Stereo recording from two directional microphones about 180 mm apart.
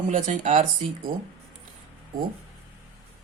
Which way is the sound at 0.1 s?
45° right (ahead or behind).